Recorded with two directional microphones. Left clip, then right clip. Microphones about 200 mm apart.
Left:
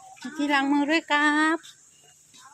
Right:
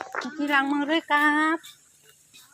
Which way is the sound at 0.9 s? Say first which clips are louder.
Even; 10° left (ahead or behind).